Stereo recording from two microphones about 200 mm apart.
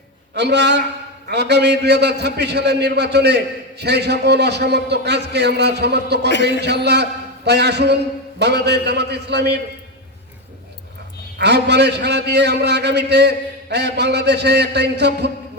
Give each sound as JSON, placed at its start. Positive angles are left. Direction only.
{"t": 0.3, "sound": "a man's voice", "side_deg": -55}
{"t": 11.3, "sound": "a man's voice", "side_deg": -55}